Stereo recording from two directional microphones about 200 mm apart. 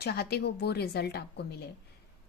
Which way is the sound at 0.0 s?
55° left (ahead or behind).